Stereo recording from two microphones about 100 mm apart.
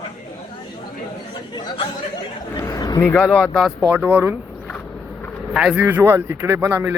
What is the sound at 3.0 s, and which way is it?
Speech, 15° left (ahead or behind).